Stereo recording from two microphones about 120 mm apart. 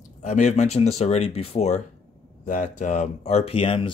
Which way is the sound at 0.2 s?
75° left (ahead or behind).